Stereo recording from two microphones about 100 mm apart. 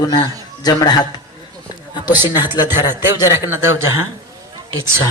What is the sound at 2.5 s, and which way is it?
Speech, 20° right (ahead or behind).